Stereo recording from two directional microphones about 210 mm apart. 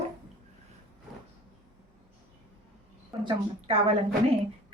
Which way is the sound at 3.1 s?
25° right (ahead or behind).